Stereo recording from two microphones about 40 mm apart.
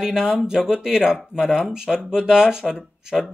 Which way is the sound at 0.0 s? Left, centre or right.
Centre.